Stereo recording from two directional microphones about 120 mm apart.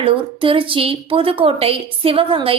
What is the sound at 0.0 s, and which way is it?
A woman's voice, 45° right (ahead or behind).